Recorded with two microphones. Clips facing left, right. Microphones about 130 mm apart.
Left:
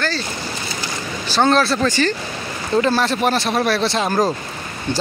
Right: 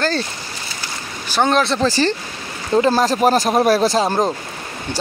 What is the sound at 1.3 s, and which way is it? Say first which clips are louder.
Speech: left 1 dB; 15° right (ahead or behind).